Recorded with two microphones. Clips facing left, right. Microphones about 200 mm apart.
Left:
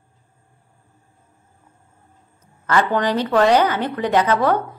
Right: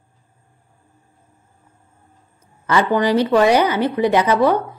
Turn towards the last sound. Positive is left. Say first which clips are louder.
# right 2 dB
turn(degrees=-10)  # may be behind; listen again after turning